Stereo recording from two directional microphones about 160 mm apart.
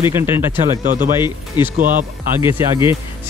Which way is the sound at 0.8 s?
55° right (ahead or behind).